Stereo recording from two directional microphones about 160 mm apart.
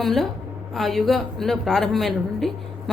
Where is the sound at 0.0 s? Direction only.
Centre (ahead or behind).